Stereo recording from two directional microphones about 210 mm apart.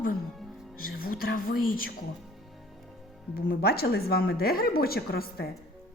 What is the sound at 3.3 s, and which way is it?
Speech, 45° left (ahead or behind).